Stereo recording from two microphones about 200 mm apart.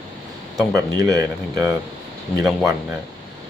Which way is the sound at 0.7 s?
15° right (ahead or behind).